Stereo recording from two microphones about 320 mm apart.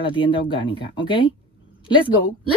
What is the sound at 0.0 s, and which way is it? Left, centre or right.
Speech, centre.